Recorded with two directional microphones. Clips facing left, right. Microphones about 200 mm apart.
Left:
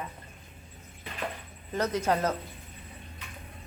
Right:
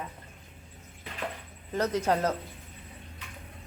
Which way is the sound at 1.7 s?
30° right (ahead or behind).